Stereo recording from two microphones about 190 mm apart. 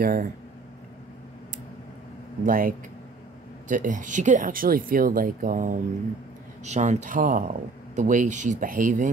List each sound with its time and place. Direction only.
0.0 s speech: 45° right (ahead or behind)
2.4 s speech: 45° right (ahead or behind)